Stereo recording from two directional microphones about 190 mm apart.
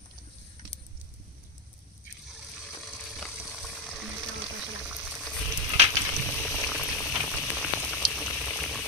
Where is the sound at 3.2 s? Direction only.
Centre (ahead or behind).